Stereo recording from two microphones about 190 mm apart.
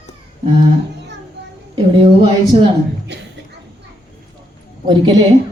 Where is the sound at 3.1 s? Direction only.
65° right (ahead or behind).